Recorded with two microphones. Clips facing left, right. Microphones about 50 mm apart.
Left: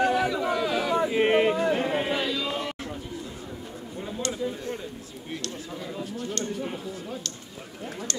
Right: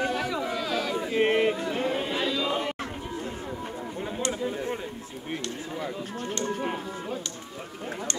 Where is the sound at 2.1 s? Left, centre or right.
Centre.